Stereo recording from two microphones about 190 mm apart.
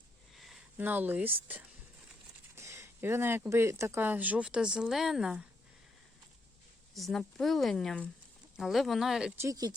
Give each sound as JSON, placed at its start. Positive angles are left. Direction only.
{"t": 0.3, "sound": "speech", "side_deg": 0}
{"t": 6.9, "sound": "speech", "side_deg": 0}
{"t": 9.4, "sound": "speech", "side_deg": -20}